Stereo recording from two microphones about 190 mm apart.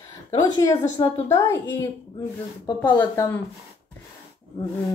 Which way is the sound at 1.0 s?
15° left (ahead or behind).